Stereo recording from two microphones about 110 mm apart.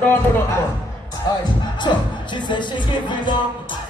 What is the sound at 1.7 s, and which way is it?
Music, 45° left (ahead or behind).